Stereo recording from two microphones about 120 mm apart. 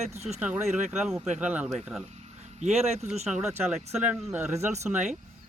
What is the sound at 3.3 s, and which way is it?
Speech, 5° right (ahead or behind).